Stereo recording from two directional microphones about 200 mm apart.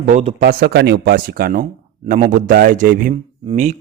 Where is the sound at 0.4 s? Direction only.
55° right (ahead or behind).